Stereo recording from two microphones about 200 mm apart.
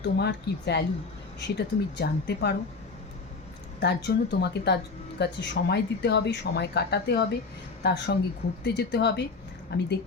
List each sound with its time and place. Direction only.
0.0 s speech: 55° left (ahead or behind)
3.8 s a woman's voice: 55° left (ahead or behind)